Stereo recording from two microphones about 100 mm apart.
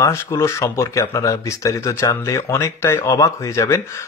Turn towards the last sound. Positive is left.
turn(degrees=30)  # may be behind; listen again after turning